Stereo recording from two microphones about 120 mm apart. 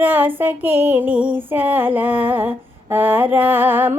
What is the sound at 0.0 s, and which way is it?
Female singing, 15° right (ahead or behind).